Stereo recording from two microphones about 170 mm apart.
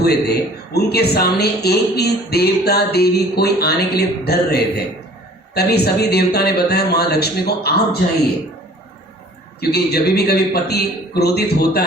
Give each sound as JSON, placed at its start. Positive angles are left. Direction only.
{"t": 0.0, "sound": "a man's voice", "side_deg": 70}
{"t": 9.6, "sound": "a man's voice", "side_deg": 70}